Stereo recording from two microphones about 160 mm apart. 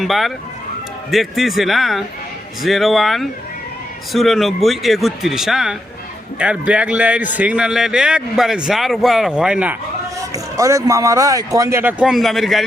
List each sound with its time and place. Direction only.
0.0 s a man's voice: centre (ahead or behind)
10.3 s speech: 20° right (ahead or behind); by 12.6 s centre (ahead or behind)